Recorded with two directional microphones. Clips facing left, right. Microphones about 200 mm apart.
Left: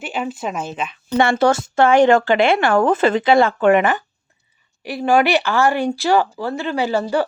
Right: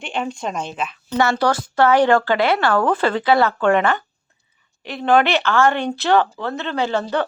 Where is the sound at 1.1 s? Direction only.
25° left (ahead or behind).